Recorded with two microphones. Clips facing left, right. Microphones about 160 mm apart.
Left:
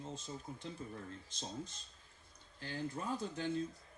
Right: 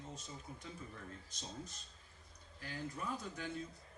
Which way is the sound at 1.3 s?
30° left (ahead or behind).